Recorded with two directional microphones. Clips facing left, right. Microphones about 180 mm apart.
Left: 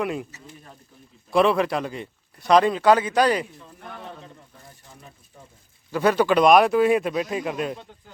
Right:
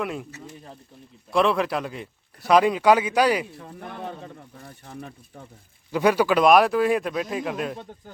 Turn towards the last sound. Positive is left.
turn(degrees=0)  # may be behind; listen again after turning